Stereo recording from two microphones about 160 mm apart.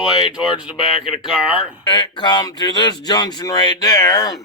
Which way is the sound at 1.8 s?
25° left (ahead or behind).